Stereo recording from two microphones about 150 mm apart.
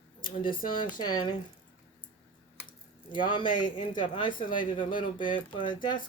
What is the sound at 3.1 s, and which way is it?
Speech, 30° left (ahead or behind).